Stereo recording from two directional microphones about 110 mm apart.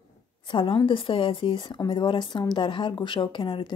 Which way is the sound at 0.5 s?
45° left (ahead or behind).